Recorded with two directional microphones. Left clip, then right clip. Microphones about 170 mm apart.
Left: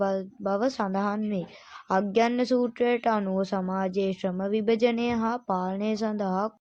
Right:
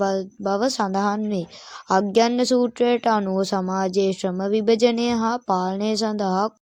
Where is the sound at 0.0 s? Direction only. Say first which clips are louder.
Right 5 dB; 35° right (ahead or behind).